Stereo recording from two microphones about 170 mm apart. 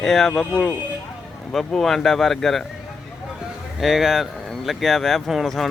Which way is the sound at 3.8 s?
Centre (ahead or behind).